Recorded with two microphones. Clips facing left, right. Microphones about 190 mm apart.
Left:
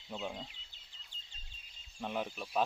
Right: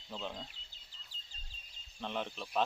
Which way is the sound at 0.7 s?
35° right (ahead or behind).